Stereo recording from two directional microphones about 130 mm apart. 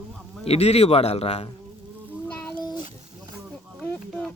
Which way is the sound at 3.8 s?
15° left (ahead or behind).